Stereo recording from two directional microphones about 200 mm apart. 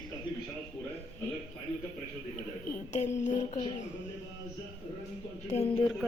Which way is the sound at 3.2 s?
35° left (ahead or behind).